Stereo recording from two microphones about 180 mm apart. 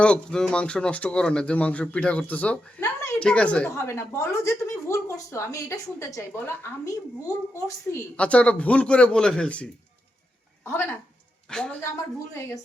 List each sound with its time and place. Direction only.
0.0 s speech: 5° left (ahead or behind)
8.1 s a woman's voice: 5° left (ahead or behind)